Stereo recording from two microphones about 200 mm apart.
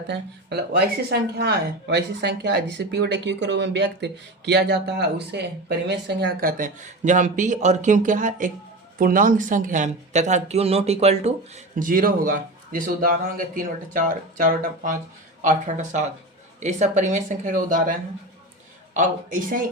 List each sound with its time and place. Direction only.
0.5 s speech: 55° right (ahead or behind)
18.9 s speech: 40° right (ahead or behind)